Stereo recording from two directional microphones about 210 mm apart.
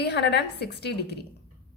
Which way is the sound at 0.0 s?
50° left (ahead or behind).